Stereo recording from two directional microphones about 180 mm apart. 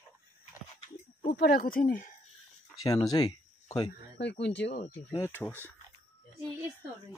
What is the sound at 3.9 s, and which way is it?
Speech, 75° left (ahead or behind).